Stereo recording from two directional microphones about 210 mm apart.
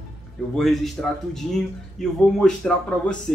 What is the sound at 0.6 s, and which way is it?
A man's voice, centre (ahead or behind).